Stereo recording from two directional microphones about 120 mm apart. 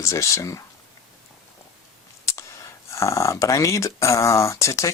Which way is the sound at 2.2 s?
25° left (ahead or behind).